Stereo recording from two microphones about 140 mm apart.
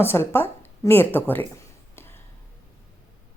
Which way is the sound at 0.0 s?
15° left (ahead or behind).